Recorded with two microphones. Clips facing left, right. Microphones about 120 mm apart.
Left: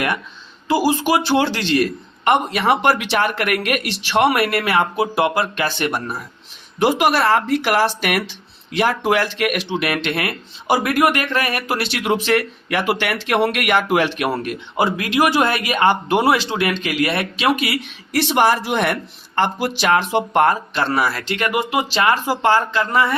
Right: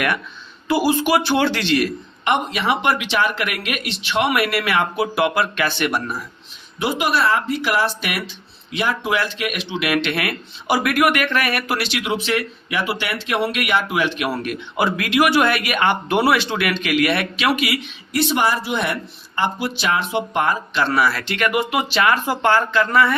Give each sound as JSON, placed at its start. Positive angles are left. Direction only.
{"t": 0.9, "sound": "speech", "side_deg": 35}
{"t": 3.1, "sound": "speech", "side_deg": 55}
{"t": 4.1, "sound": "speech", "side_deg": 40}
{"t": 4.9, "sound": "speech", "side_deg": 25}
{"t": 6.7, "sound": "speech", "side_deg": 50}
{"t": 8.8, "sound": "speech", "side_deg": 50}
{"t": 9.8, "sound": "speech", "side_deg": 30}
{"t": 14.3, "sound": "speech", "side_deg": 30}
{"t": 18.1, "sound": "a man's voice", "side_deg": 50}
{"t": 20.9, "sound": "speech", "side_deg": 40}